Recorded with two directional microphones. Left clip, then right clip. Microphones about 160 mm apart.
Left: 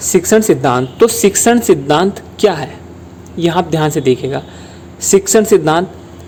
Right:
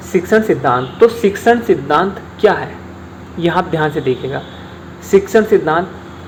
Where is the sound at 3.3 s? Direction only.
55° left (ahead or behind); by 5.8 s 90° left.